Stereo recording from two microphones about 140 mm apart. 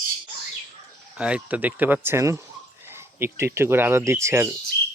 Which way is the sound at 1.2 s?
10° right (ahead or behind).